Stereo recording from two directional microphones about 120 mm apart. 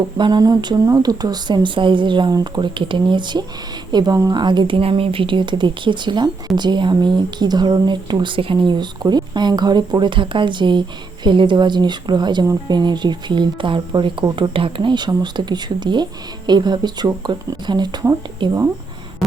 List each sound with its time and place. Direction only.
0.2 s speech: 30° right (ahead or behind)